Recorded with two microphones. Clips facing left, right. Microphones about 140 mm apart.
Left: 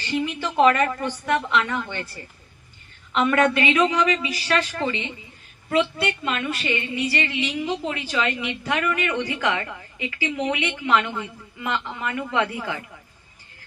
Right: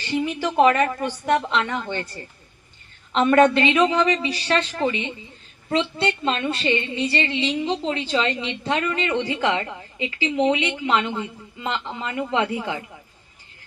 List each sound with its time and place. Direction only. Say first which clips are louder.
0.3 s a woman's voice: right 1 dB; 15° right (ahead or behind)
3.1 s a woman's voice: right 4 dB; 30° right (ahead or behind)